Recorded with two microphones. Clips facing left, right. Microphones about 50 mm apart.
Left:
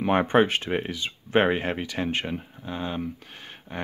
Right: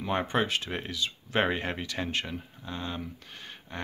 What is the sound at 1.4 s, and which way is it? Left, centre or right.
Speech, centre.